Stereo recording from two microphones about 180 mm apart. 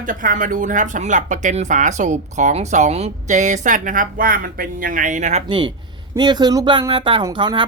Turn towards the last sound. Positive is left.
turn(degrees=-25)  # may be behind; listen again after turning